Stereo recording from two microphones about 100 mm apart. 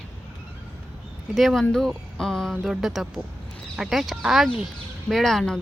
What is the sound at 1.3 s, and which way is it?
Speech, centre (ahead or behind).